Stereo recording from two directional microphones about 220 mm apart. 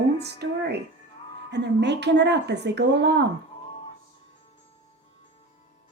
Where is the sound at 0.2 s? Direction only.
50° right (ahead or behind).